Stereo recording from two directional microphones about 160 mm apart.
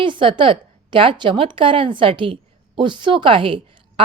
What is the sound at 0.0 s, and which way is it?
A woman's voice, 30° right (ahead or behind).